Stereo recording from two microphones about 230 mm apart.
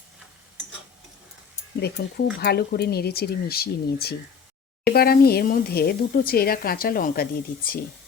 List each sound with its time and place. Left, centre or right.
2.0 s speech: left